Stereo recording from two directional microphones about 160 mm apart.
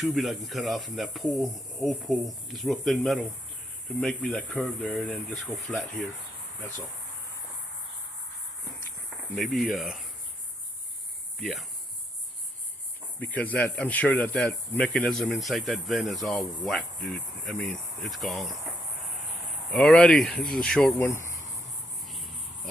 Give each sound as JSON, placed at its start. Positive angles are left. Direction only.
{"t": 0.0, "sound": "speech", "side_deg": 0}
{"t": 9.3, "sound": "speech", "side_deg": 0}
{"t": 11.3, "sound": "speech", "side_deg": 0}
{"t": 13.1, "sound": "speech", "side_deg": 10}
{"t": 19.7, "sound": "speech", "side_deg": 5}
{"t": 21.1, "sound": "speech", "side_deg": 15}